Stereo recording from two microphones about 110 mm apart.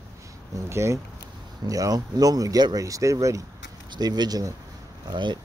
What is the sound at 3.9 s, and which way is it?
Speech, 40° right (ahead or behind).